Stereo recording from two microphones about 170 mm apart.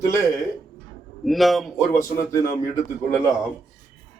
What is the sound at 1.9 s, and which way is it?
Speech, 20° left (ahead or behind).